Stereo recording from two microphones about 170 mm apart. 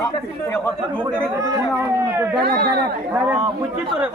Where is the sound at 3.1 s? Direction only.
10° right (ahead or behind).